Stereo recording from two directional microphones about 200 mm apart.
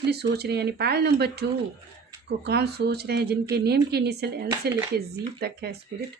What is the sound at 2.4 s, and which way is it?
A woman's voice, 55° right (ahead or behind).